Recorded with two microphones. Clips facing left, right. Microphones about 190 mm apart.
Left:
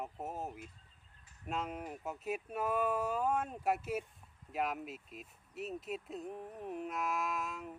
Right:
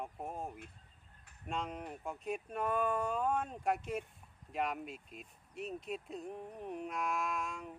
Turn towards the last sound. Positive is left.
turn(degrees=0)  # may be behind; listen again after turning